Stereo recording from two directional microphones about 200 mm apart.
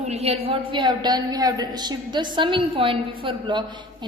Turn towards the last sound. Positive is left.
turn(degrees=-25)  # may be behind; listen again after turning